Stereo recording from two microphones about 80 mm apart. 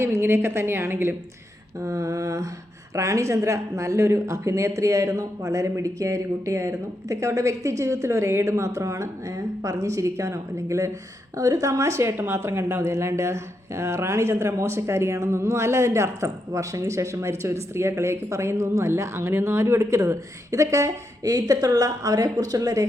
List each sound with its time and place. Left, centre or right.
0.0 s a woman's voice: right